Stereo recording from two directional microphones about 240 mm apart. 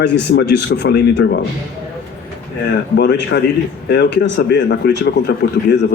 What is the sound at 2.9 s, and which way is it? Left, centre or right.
A man's voice, left.